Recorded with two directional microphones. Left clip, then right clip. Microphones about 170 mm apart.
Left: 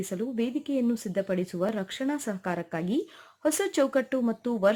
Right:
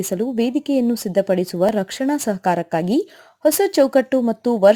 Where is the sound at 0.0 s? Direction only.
30° right (ahead or behind).